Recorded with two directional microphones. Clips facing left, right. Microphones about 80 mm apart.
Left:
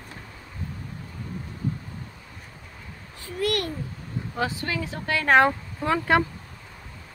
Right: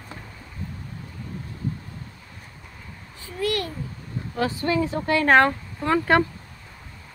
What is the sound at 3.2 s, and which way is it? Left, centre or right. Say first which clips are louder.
Speech: even; left.